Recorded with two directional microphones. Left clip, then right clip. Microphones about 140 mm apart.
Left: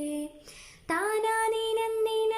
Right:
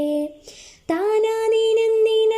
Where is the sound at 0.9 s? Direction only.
20° right (ahead or behind).